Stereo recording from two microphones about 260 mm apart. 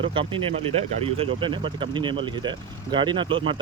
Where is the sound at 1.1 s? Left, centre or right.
Right.